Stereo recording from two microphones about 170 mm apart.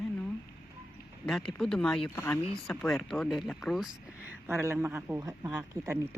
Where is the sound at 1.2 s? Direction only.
5° left (ahead or behind).